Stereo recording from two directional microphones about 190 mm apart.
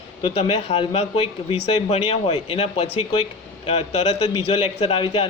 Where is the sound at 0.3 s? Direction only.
30° left (ahead or behind).